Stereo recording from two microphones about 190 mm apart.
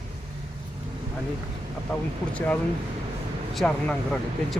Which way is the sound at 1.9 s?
5° left (ahead or behind).